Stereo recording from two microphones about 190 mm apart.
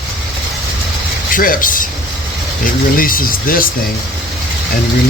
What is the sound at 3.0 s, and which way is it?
Speech, 50° left (ahead or behind).